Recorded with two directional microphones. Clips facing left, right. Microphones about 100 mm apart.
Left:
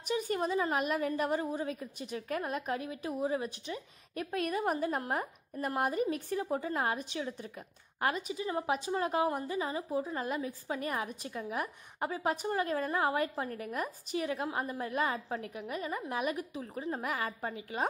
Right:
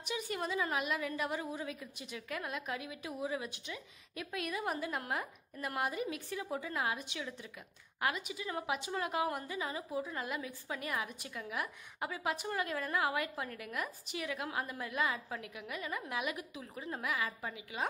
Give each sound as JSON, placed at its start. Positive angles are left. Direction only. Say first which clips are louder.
{"t": 0.1, "sound": "a woman's voice", "louder": "left 6 dB", "side_deg": 40}